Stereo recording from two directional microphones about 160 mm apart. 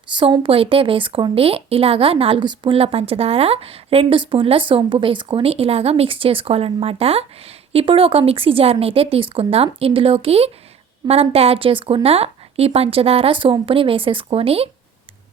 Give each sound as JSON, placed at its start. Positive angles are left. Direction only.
{"t": 0.1, "sound": "a woman's voice", "side_deg": -30}